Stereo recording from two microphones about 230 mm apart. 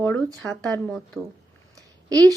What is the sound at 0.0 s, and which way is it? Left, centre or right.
A woman's voice, centre.